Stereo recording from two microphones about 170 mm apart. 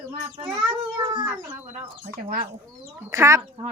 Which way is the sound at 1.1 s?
25° right (ahead or behind).